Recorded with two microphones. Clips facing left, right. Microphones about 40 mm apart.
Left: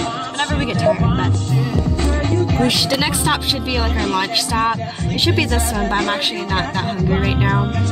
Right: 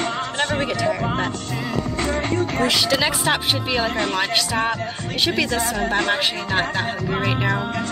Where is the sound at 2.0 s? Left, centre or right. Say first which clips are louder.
Left 2 dB; right.